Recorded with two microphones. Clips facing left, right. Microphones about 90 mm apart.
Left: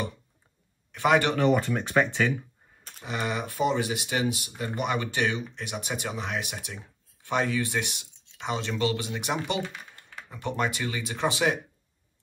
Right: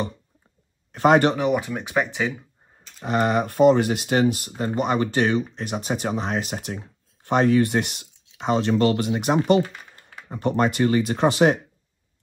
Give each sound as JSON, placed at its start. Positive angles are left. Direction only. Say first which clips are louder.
{"t": 0.9, "sound": "speech", "louder": "right 6 dB", "side_deg": -45}
{"t": 1.3, "sound": "speech", "louder": "right 1 dB", "side_deg": -10}
{"t": 3.0, "sound": "speech", "louder": "right 9 dB", "side_deg": -55}
{"t": 4.6, "sound": "speech", "louder": "right 6 dB", "side_deg": -40}